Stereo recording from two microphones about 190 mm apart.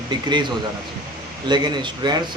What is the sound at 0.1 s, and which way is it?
Speech, 25° right (ahead or behind).